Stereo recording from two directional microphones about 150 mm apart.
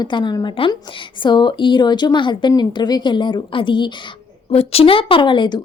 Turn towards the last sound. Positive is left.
turn(degrees=30)  # may be behind; listen again after turning